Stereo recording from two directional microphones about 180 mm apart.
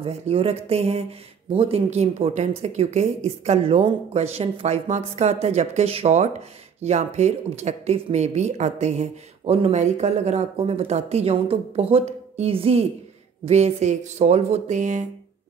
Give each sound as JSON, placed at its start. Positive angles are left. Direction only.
{"t": 0.0, "sound": "speech", "side_deg": -30}